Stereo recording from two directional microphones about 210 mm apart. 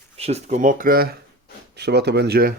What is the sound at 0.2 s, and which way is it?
Speech, 30° right (ahead or behind).